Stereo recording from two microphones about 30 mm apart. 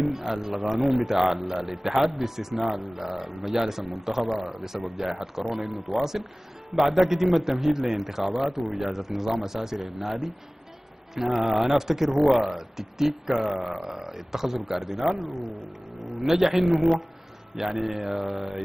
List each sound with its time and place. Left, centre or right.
0.0 s a man's voice: centre
11.4 s a man's voice: centre
12.4 s speech: centre
12.7 s a man's voice: centre